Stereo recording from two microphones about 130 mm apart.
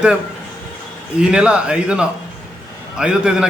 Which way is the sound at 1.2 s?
10° right (ahead or behind).